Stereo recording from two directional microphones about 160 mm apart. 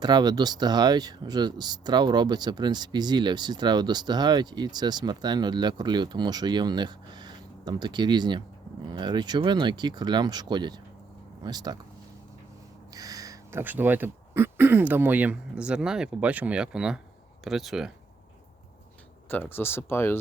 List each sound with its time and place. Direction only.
0.0 s speech: 25° right (ahead or behind)
12.9 s speech: 20° right (ahead or behind); by 17.9 s centre (ahead or behind)
19.3 s speech: 15° left (ahead or behind)